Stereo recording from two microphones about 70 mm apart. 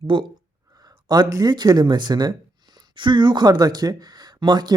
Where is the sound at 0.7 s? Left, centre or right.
Right.